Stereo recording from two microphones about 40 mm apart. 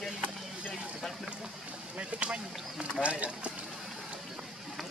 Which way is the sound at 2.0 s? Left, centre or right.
Right.